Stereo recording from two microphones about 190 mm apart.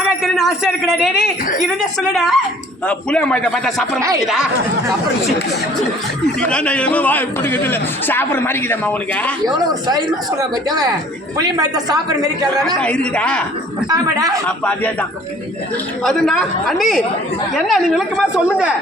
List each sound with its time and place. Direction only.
0.2 s a man's voice: centre (ahead or behind)
6.4 s a man's voice: 5° left (ahead or behind)
11.3 s a woman's voice: 20° right (ahead or behind)
12.6 s a man's voice: 5° left (ahead or behind)
13.9 s a woman's voice: 20° right (ahead or behind)
14.4 s a man's voice: 10° left (ahead or behind)
16.0 s a man's voice: centre (ahead or behind)